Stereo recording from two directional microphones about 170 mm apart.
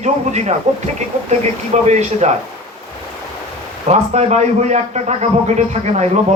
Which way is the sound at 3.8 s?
40° right (ahead or behind).